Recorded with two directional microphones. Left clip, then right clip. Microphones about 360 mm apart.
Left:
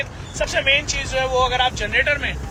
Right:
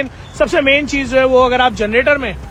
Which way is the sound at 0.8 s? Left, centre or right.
Centre.